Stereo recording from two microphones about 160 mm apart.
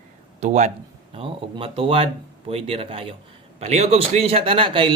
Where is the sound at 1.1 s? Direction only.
35° right (ahead or behind).